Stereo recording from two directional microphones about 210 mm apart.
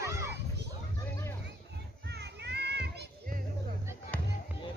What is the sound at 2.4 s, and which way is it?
Children playing, 50° right (ahead or behind).